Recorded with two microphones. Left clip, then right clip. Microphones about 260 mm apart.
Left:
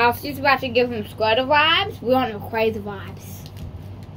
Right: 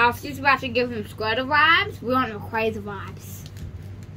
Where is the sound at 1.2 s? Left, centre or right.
Left.